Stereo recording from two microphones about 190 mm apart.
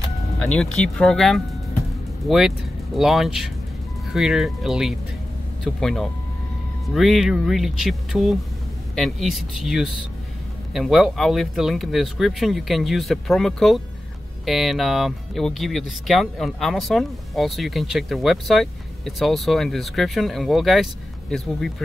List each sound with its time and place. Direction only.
0.4 s speech: 5° left (ahead or behind)